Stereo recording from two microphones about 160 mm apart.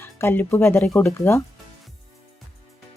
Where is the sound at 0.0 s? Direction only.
15° left (ahead or behind).